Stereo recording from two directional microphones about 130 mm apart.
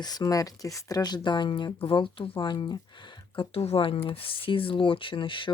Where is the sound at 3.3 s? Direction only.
45° left (ahead or behind).